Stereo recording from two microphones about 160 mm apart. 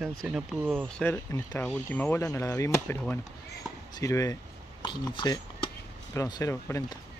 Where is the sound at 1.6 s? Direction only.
5° left (ahead or behind).